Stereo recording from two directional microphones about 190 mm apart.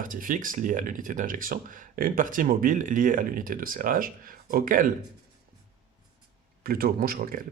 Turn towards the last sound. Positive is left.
turn(degrees=-50)  # may be behind; listen again after turning